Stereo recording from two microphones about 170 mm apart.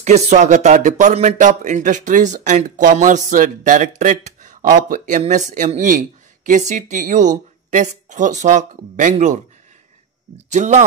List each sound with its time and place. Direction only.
0.0 s speech: 40° right (ahead or behind)
10.5 s speech: 45° right (ahead or behind)